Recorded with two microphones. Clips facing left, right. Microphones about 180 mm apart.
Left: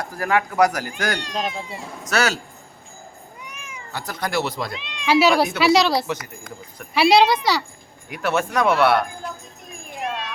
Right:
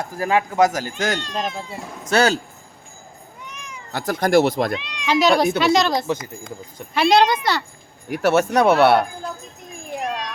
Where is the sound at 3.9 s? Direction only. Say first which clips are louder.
Right 9 dB; 45° right (ahead or behind).